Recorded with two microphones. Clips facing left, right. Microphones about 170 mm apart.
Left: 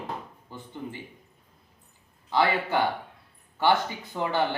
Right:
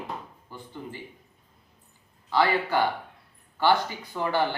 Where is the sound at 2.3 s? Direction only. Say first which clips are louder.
Right 1 dB; 20° left (ahead or behind).